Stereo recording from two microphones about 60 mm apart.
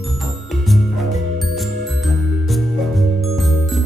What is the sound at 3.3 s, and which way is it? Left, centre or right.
Music, centre.